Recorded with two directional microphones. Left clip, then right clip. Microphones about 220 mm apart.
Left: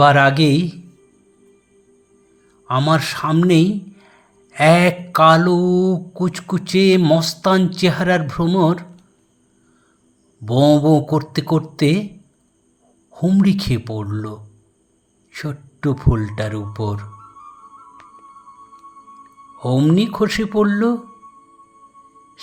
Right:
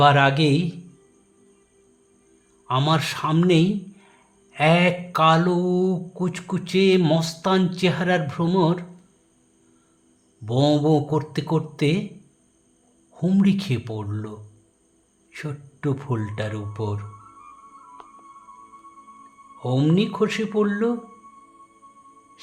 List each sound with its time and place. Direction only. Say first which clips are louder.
0.0 s speech: left 5 dB; 15° left (ahead or behind)
2.6 s speech: left 5 dB; 10° left (ahead or behind)
10.6 s speech: left 6 dB; 15° left (ahead or behind)
13.1 s speech: left 4 dB; 15° left (ahead or behind)
19.5 s speech: left 5 dB; 15° left (ahead or behind)